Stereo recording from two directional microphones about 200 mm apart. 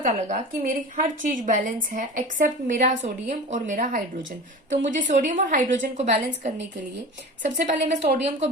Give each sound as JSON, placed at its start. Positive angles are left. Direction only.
{"t": 0.0, "sound": "a woman's voice", "side_deg": -40}
{"t": 7.9, "sound": "a woman's voice", "side_deg": -60}